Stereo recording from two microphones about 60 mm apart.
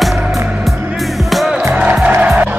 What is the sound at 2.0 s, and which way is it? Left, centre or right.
Music, right.